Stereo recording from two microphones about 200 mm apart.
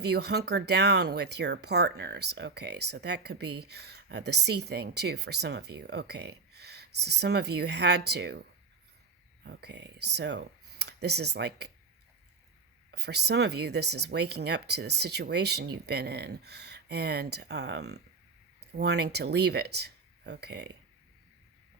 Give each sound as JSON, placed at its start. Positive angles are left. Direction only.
{"t": 0.0, "sound": "speech", "side_deg": -55}
{"t": 9.4, "sound": "speech", "side_deg": -55}
{"t": 12.9, "sound": "speech", "side_deg": -55}